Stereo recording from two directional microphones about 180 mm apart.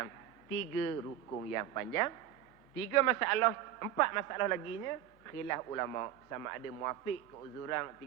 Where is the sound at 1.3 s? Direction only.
15° left (ahead or behind).